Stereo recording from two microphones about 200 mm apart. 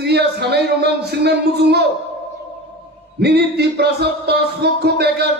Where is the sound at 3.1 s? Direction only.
55° right (ahead or behind).